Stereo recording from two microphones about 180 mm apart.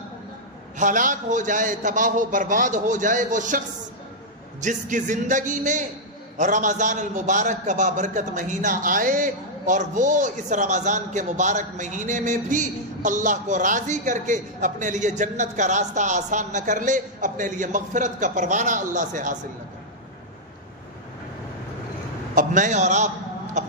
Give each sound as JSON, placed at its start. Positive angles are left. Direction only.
{"t": 0.7, "sound": "a man's voice", "side_deg": -45}
{"t": 22.3, "sound": "a man's voice", "side_deg": -45}